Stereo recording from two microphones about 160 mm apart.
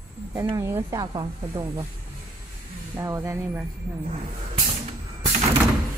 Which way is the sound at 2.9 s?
20° right (ahead or behind).